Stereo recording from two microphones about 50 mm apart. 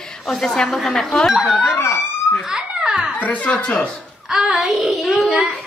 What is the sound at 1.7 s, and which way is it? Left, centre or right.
Speech, left.